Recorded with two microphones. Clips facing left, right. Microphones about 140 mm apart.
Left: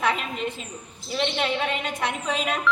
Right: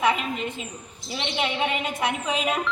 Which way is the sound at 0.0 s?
5° right (ahead or behind).